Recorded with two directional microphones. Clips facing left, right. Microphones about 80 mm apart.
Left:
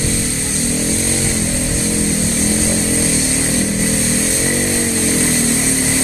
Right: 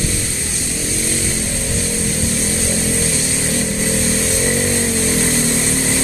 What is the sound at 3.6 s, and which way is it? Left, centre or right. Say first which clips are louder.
Vehicle: left 2 dB; centre.